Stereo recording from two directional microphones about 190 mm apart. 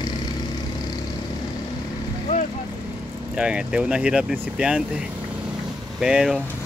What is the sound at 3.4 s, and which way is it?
Speech, 5° right (ahead or behind).